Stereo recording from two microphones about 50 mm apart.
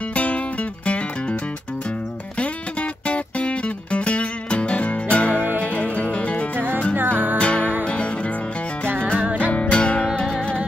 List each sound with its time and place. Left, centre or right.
0.1 s music: left
2.3 s music: left
5.3 s music: right
5.7 s music: left
6.5 s music: right
7.3 s music: left
8.8 s music: right
9.5 s music: left
10.1 s music: centre